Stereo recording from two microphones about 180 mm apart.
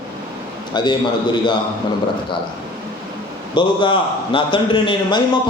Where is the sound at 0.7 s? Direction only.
25° left (ahead or behind).